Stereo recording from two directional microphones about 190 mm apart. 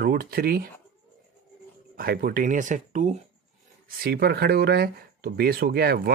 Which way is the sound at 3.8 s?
55° right (ahead or behind).